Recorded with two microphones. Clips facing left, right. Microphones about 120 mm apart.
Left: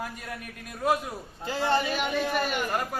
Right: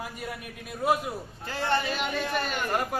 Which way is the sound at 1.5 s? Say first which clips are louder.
Left 2 dB; 15° left (ahead or behind).